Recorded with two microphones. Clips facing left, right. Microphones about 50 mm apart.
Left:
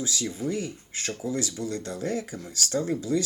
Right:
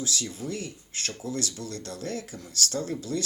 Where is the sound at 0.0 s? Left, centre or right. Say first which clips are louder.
Left 3 dB; left.